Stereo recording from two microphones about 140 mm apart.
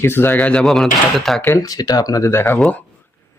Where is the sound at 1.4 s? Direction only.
20° left (ahead or behind).